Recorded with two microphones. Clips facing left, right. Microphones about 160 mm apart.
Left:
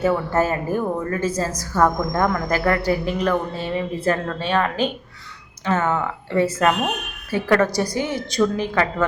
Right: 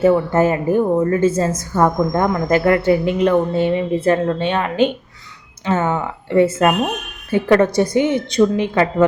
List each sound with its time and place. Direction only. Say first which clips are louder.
0.0 s a woman's voice: right 6 dB; 20° right (ahead or behind)